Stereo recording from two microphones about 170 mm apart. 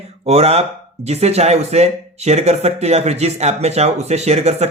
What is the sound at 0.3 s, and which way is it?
Speech, 40° right (ahead or behind).